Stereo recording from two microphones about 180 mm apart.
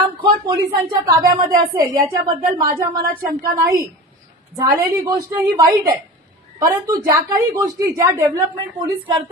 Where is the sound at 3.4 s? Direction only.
15° right (ahead or behind).